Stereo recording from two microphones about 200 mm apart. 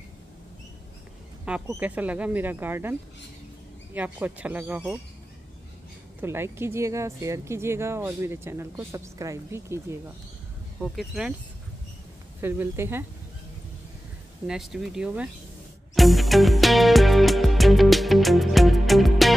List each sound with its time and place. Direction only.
1.4 s speech: 5° right (ahead or behind)
6.2 s speech: 10° right (ahead or behind)
10.8 s speech: centre (ahead or behind)
12.4 s speech: 10° right (ahead or behind)
14.4 s speech: 5° right (ahead or behind)
15.9 s music: centre (ahead or behind)